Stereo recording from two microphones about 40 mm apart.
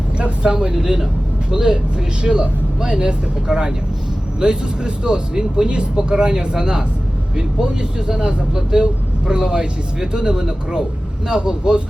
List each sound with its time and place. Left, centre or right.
0.2 s speech: right